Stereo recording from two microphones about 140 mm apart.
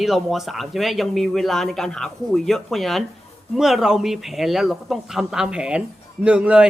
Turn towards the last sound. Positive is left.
turn(degrees=-5)  # may be behind; listen again after turning